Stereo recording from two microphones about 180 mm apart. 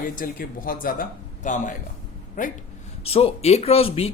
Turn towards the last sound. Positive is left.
turn(degrees=35)  # may be behind; listen again after turning